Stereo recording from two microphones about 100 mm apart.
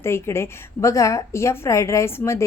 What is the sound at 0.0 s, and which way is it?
Speech, 25° left (ahead or behind).